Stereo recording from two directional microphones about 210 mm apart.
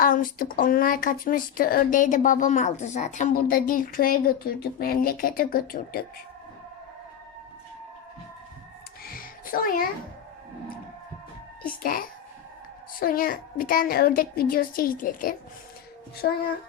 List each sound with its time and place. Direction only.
0.0 s speech: 40° left (ahead or behind)
9.0 s a sound: 40° left (ahead or behind)
11.8 s speech: 45° left (ahead or behind)